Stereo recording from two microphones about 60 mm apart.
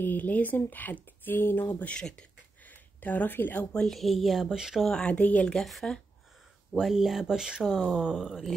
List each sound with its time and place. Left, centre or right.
0.0 s speech: left
2.6 s a sound: left
3.7 s speech: centre
5.0 s speech: left
5.5 s speech: centre